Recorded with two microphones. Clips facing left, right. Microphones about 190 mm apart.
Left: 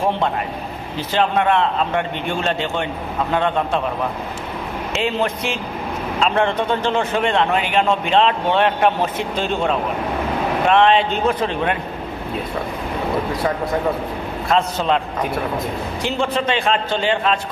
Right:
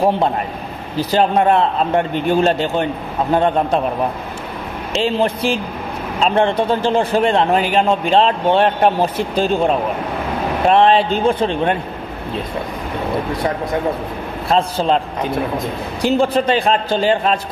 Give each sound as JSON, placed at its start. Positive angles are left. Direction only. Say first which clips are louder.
{"t": 0.9, "sound": "a man's voice", "louder": "right 4 dB", "side_deg": -40}
{"t": 5.0, "sound": "a man's voice", "louder": "right 5 dB", "side_deg": -30}
{"t": 14.5, "sound": "a man's voice", "louder": "right 2 dB", "side_deg": -30}
{"t": 16.0, "sound": "a man's voice", "louder": "right 7 dB", "side_deg": -40}